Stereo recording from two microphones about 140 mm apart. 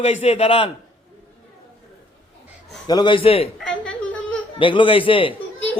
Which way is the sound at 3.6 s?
5° left (ahead or behind).